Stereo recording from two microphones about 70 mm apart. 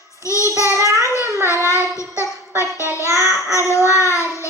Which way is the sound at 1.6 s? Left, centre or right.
Left.